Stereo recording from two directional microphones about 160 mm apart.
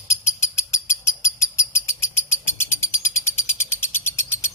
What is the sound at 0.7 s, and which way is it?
Bird, 15° left (ahead or behind).